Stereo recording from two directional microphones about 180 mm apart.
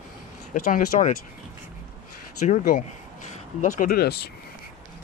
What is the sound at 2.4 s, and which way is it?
Speech, 45° left (ahead or behind).